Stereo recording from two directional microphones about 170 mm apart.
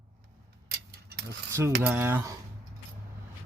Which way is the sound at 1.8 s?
10° right (ahead or behind).